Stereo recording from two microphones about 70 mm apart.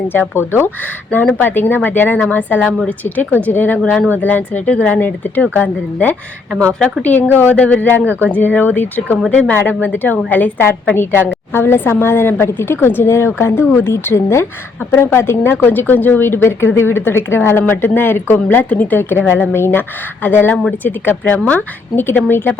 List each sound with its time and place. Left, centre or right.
0.1 s speech: left; by 6.9 s centre
7.0 s speech: left